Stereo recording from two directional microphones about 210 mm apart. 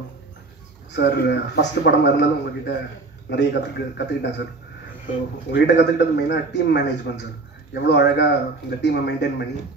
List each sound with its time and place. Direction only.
0.9 s a man's voice: 50° left (ahead or behind)
5.5 s a man's voice: 55° left (ahead or behind)